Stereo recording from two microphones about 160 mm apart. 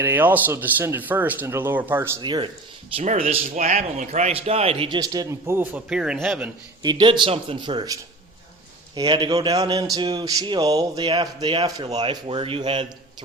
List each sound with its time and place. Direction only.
0.0 s a man's voice: 10° right (ahead or behind)
2.2 s speech: 30° right (ahead or behind)
3.0 s speech: 45° right (ahead or behind)
4.9 s a man's voice: 20° right (ahead or behind); by 6.5 s 5° right (ahead or behind)
6.8 s speech: 30° right (ahead or behind)
9.0 s speech: 30° right (ahead or behind)